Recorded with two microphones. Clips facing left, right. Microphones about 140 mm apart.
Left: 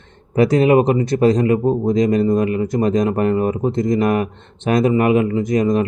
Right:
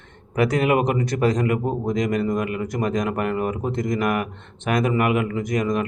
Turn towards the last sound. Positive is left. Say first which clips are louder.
# left 6 dB
turn(degrees=30)  # may be behind; listen again after turning